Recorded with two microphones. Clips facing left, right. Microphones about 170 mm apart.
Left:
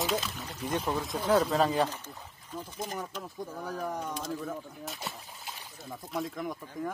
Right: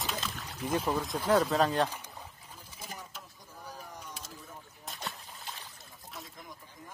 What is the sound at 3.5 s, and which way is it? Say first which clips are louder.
Speech: left 10 dB; 90° left.